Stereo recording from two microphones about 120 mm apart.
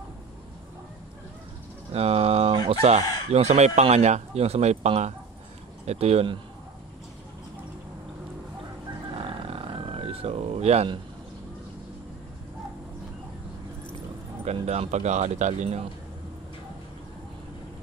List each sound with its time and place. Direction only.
1.9 s speech: 60° right (ahead or behind)
9.2 s a sound: 55° right (ahead or behind)
14.4 s speech: 60° right (ahead or behind)